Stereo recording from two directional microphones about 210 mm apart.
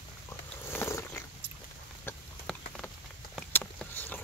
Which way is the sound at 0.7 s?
10° left (ahead or behind).